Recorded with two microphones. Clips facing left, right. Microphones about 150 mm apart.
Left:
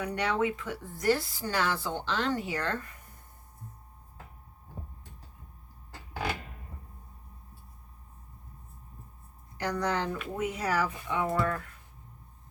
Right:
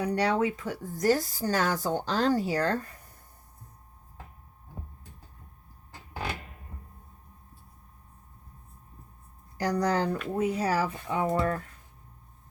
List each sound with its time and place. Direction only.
0.0 s a woman's voice: 35° right (ahead or behind)
9.6 s a woman's voice: 35° right (ahead or behind)